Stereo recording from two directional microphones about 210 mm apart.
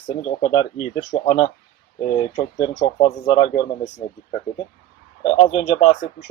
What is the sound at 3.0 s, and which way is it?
Speech, 30° left (ahead or behind).